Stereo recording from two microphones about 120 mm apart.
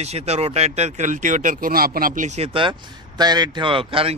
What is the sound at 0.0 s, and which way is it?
Speech, 60° right (ahead or behind).